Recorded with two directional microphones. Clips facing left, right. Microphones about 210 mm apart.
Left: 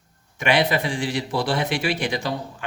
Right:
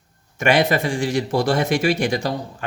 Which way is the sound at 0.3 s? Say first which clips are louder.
Right 3 dB; 45° right (ahead or behind).